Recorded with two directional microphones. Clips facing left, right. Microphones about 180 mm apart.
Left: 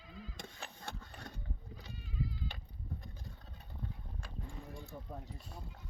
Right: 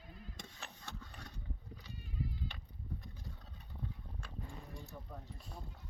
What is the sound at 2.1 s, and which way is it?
Bleat, 90° left.